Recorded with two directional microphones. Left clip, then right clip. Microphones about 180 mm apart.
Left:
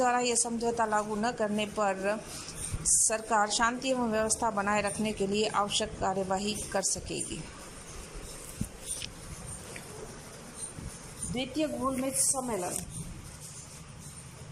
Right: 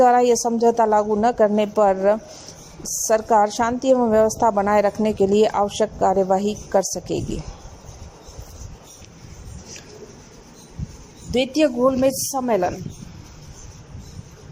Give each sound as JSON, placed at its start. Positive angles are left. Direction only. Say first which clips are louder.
{"t": 0.0, "sound": "a woman's voice", "louder": "right 13 dB", "side_deg": -45}
{"t": 11.3, "sound": "a woman's voice", "louder": "right 14 dB", "side_deg": -60}